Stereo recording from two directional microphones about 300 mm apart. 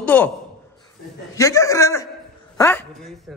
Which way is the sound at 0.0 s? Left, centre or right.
Centre.